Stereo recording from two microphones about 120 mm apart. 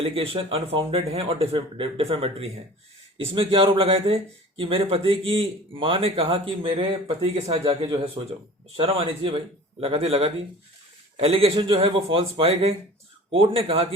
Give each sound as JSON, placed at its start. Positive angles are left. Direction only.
{"t": 0.0, "sound": "speech", "side_deg": -50}